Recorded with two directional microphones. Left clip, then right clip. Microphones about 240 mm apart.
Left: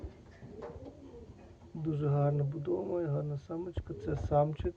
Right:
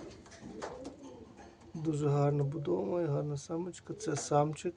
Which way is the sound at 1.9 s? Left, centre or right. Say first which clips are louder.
Right 2 dB; centre.